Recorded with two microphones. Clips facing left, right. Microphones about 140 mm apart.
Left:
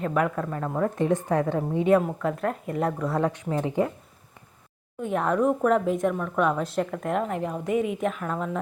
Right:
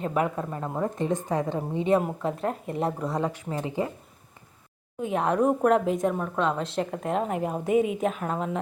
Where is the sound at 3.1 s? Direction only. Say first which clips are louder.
Left 3 dB; 10° right (ahead or behind).